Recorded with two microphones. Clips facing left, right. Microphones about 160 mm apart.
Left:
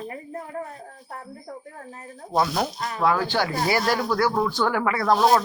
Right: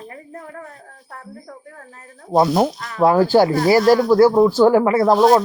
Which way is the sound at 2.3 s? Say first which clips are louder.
Right 8 dB; 30° right (ahead or behind).